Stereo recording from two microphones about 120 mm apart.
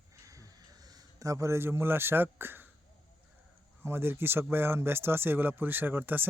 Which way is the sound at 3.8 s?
20° right (ahead or behind).